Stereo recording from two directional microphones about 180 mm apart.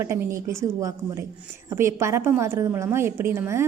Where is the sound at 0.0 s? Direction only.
15° right (ahead or behind).